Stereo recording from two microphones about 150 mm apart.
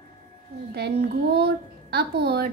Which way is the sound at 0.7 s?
90° right.